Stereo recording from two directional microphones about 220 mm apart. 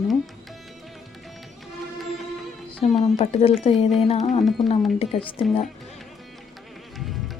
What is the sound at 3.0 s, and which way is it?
Speech, 30° left (ahead or behind).